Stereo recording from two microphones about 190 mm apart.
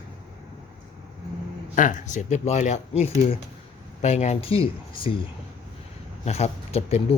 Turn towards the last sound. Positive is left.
turn(degrees=35)  # may be behind; listen again after turning